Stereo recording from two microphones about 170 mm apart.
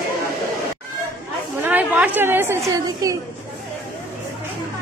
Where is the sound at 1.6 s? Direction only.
10° right (ahead or behind).